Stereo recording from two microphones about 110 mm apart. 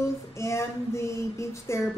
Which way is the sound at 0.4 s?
25° left (ahead or behind).